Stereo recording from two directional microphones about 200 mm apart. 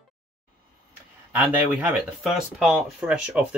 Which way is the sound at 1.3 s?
5° right (ahead or behind).